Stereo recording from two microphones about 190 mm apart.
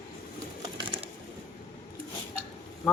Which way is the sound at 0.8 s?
25° right (ahead or behind).